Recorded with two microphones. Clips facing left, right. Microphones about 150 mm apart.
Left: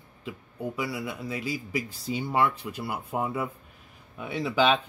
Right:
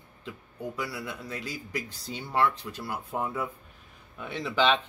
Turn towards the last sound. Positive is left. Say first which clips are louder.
# left 2 dB
turn(degrees=10)  # may be behind; listen again after turning